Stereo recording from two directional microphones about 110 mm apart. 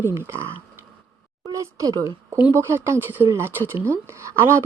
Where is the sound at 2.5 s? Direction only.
25° right (ahead or behind).